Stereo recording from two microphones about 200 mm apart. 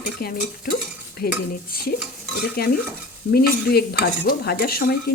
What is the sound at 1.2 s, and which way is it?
Speech, 50° left (ahead or behind).